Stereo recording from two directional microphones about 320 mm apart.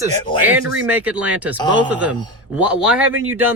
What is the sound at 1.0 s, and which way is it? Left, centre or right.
Speech, centre.